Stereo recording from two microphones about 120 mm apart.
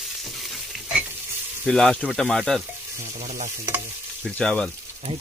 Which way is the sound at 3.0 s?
70° right (ahead or behind).